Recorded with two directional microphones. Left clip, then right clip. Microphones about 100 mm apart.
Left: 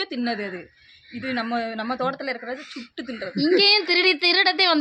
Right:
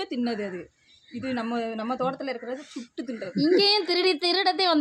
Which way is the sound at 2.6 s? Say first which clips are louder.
Left 3 dB; 20° right (ahead or behind).